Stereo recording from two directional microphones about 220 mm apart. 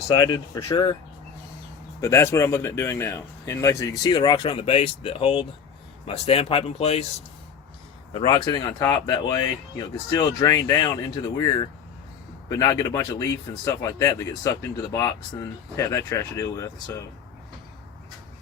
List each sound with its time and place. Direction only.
0.1 s speech: 20° left (ahead or behind)
2.0 s speech: 10° left (ahead or behind)
8.1 s speech: 20° left (ahead or behind)